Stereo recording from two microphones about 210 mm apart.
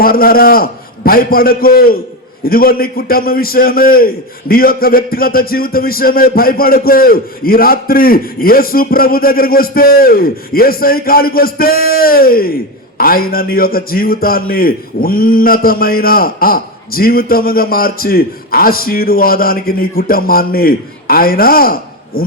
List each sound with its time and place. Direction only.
0.0 s a man's voice: 45° left (ahead or behind)